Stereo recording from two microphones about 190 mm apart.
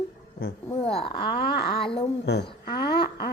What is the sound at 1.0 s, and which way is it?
A child's voice, 25° left (ahead or behind).